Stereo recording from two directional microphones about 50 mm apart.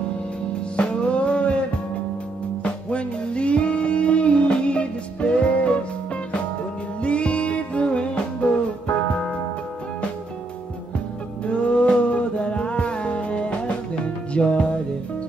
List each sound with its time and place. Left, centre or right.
0.7 s music: left
2.6 s music: left
7.0 s music: left
11.4 s music: left